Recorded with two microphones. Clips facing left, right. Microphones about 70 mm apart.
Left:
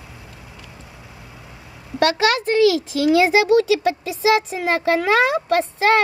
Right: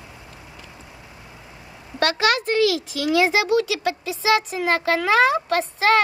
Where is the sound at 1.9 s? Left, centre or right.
Left.